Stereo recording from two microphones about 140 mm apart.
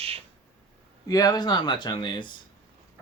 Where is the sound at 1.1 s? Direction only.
25° left (ahead or behind).